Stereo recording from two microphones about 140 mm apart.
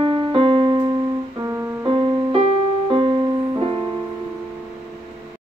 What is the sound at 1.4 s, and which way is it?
Music, 20° right (ahead or behind).